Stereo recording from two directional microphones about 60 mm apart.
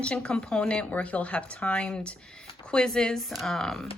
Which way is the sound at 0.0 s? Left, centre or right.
Centre.